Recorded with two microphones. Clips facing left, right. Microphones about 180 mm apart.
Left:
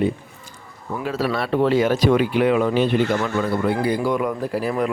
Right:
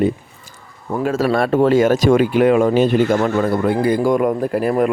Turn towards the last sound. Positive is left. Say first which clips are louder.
# right 5 dB
turn(degrees=-50)  # may be behind; listen again after turning